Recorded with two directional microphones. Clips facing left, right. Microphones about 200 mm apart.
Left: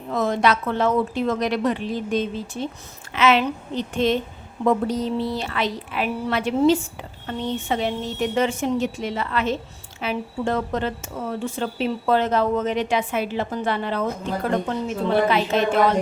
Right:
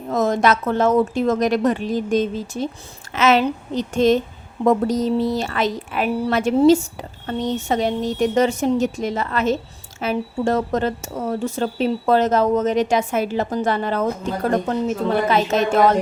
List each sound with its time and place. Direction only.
0.1 s speech: 45° right (ahead or behind)